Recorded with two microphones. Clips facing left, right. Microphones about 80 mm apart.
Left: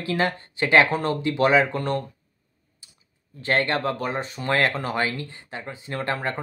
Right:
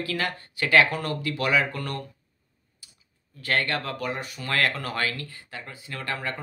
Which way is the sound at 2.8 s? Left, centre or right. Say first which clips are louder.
Even; left.